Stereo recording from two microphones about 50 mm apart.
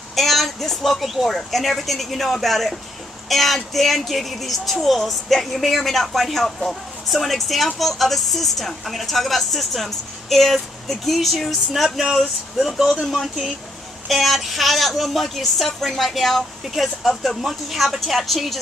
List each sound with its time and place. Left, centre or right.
0.1 s speech: centre